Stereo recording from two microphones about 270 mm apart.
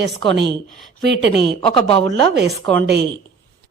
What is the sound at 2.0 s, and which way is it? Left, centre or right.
A woman's voice, right.